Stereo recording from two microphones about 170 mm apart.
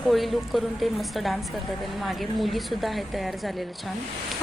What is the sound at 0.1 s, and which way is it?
A woman's voice, centre (ahead or behind).